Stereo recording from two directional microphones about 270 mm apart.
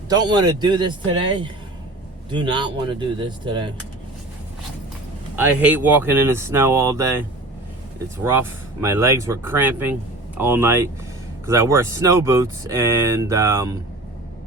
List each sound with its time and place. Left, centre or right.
0.1 s speech: centre
5.4 s speech: centre